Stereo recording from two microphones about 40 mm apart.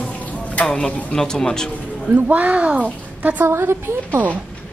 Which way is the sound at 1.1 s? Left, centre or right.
Centre.